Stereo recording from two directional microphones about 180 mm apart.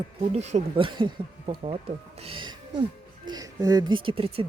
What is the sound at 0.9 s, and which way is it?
Speech, 25° right (ahead or behind).